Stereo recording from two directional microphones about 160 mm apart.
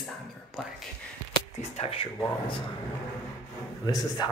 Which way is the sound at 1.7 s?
35° left (ahead or behind).